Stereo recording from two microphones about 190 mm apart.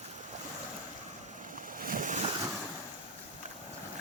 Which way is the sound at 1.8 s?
45° right (ahead or behind).